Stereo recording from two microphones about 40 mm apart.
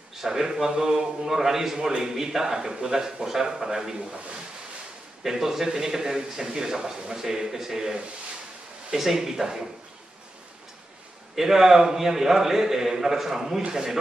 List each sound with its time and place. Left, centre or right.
0.1 s a man's voice: centre
5.2 s a man's voice: centre
11.3 s a man's voice: centre